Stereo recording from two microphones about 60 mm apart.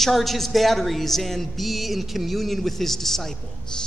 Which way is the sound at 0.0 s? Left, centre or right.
Centre.